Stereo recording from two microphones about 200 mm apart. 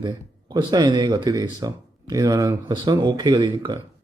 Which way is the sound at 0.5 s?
20° right (ahead or behind).